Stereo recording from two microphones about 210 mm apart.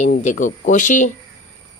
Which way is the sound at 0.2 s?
35° left (ahead or behind).